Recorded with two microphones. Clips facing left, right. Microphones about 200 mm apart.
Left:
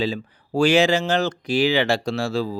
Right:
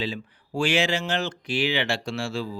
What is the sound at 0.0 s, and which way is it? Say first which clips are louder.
Speech: left 6 dB; 40° left (ahead or behind).